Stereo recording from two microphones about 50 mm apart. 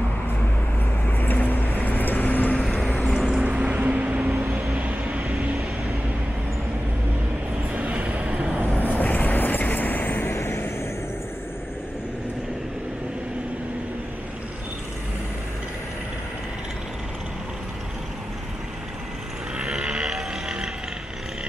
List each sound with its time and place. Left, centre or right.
1.1 s vehicle: left
3.1 s vehicle: centre
3.4 s vehicle: right
7.7 s vehicle: right
8.7 s vehicle: left
10.2 s vehicle: left
19.6 s sheep: centre
20.1 s music: centre